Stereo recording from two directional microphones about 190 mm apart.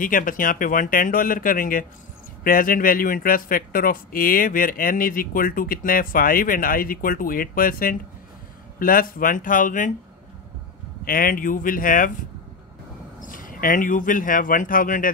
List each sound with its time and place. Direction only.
0.0 s speech: 45° left (ahead or behind)
11.1 s speech: 50° left (ahead or behind)
13.2 s speech: 45° left (ahead or behind)